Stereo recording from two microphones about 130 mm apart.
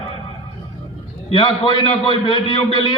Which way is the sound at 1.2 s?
45° left (ahead or behind).